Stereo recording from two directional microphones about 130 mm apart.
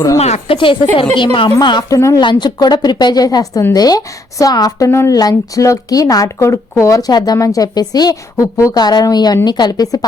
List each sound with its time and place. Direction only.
0.2 s a woman's voice: 55° left (ahead or behind); by 2.2 s 25° left (ahead or behind)
2.2 s a woman's voice: 35° left (ahead or behind)